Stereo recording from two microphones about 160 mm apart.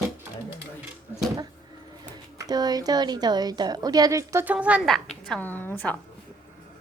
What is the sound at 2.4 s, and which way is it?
A woman's voice, 25° right (ahead or behind).